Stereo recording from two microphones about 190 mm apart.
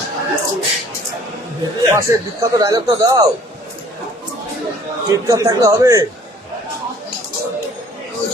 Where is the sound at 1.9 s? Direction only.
15° right (ahead or behind).